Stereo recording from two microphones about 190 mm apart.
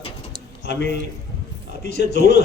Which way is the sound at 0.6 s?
65° left (ahead or behind).